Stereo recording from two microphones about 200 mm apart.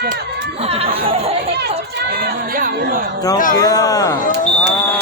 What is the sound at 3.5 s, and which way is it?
Speech, 20° left (ahead or behind).